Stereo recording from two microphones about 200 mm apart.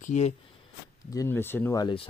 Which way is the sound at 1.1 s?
10° left (ahead or behind).